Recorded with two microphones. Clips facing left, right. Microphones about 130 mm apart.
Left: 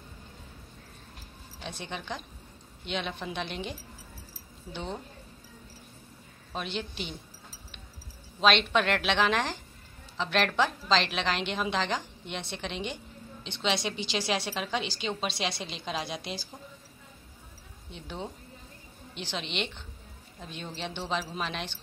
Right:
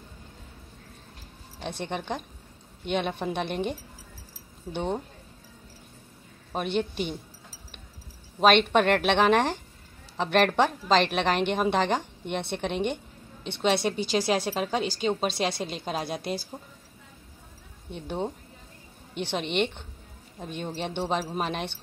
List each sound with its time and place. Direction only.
1.9 s a woman's voice: 55° right (ahead or behind)
6.5 s a woman's voice: 55° right (ahead or behind)
8.4 s a woman's voice: 50° right (ahead or behind)
17.9 s a woman's voice: 55° right (ahead or behind)